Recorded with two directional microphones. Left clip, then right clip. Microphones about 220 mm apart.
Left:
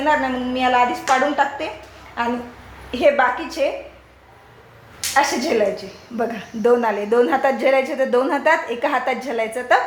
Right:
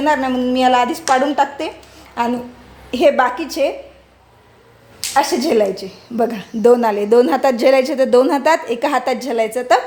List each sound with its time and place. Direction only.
0.0 s a woman's voice: 60° right (ahead or behind)
5.1 s a woman's voice: 55° right (ahead or behind)